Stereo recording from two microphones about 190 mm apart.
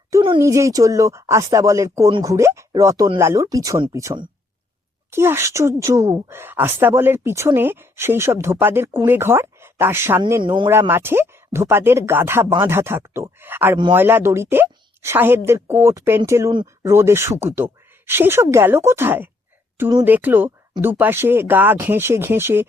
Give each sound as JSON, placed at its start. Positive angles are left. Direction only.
{"t": 0.1, "sound": "a woman's voice", "side_deg": -20}
{"t": 10.7, "sound": "a woman's voice", "side_deg": -10}
{"t": 16.5, "sound": "speech", "side_deg": -25}
{"t": 16.9, "sound": "a woman's voice", "side_deg": -15}